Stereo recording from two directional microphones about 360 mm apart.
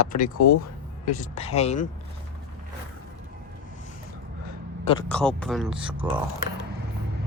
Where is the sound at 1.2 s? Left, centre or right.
Centre.